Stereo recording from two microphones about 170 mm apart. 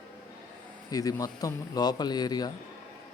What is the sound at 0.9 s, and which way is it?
A man's voice, 20° left (ahead or behind).